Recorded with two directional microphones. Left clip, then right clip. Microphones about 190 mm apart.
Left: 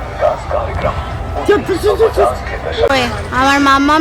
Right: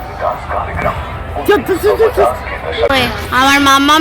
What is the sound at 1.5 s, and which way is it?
Speech, 45° right (ahead or behind).